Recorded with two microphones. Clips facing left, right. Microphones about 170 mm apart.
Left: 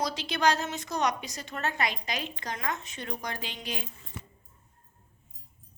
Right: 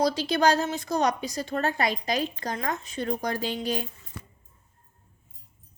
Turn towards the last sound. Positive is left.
turn(degrees=-40)  # may be behind; listen again after turning